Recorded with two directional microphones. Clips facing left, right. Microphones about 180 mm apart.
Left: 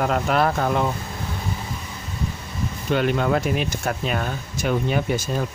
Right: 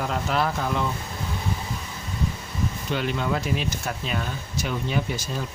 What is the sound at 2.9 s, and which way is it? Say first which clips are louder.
Speech: left 7 dB; 55° left (ahead or behind).